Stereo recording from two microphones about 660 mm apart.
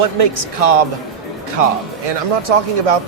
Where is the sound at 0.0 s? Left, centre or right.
Right.